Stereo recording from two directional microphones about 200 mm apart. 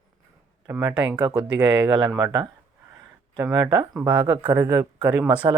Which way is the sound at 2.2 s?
20° right (ahead or behind).